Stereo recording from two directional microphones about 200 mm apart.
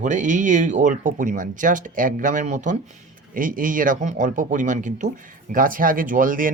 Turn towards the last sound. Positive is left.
turn(degrees=-45)  # may be behind; listen again after turning